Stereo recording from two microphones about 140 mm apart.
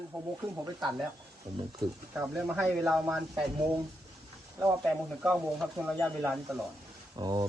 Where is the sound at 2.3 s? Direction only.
10° right (ahead or behind).